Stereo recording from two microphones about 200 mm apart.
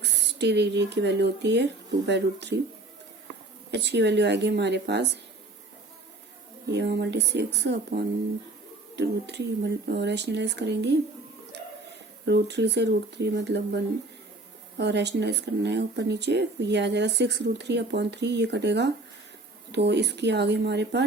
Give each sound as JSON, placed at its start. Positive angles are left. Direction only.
{"t": 0.0, "sound": "speech", "side_deg": -60}
{"t": 3.7, "sound": "speech", "side_deg": -60}
{"t": 6.7, "sound": "speech", "side_deg": -55}
{"t": 12.2, "sound": "speech", "side_deg": -60}